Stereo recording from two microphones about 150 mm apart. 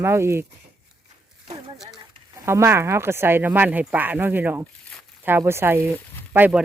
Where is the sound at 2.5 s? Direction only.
15° right (ahead or behind).